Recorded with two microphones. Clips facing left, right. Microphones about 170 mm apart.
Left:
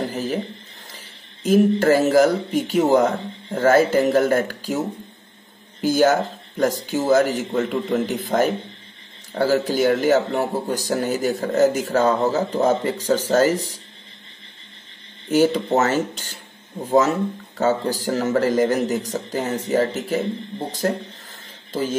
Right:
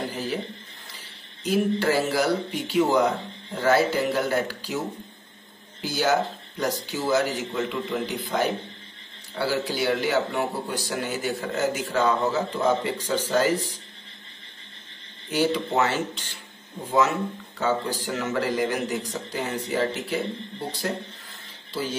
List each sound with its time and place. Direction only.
0.0 s a sound: 45° left (ahead or behind)
1.4 s a man's voice: 45° left (ahead or behind)
15.2 s a man's voice: 45° left (ahead or behind)